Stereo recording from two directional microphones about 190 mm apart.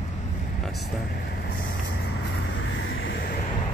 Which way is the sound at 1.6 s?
55° left (ahead or behind).